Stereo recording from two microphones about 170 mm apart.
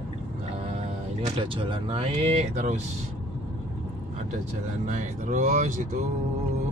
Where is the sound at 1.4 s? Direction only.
30° right (ahead or behind).